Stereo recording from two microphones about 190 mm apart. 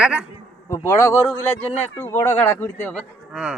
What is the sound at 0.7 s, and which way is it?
Speech, 15° left (ahead or behind).